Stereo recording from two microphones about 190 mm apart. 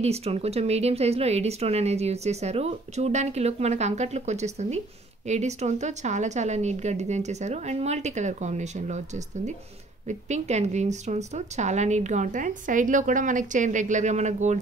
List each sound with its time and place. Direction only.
0.0 s a woman's voice: 35° right (ahead or behind)